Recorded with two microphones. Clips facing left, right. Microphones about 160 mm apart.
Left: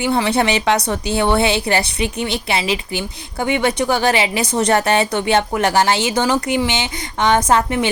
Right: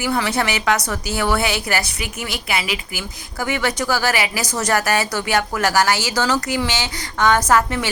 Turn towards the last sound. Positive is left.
turn(degrees=20)  # may be behind; listen again after turning